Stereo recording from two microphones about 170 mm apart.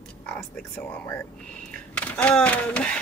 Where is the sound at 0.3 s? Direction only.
5° left (ahead or behind).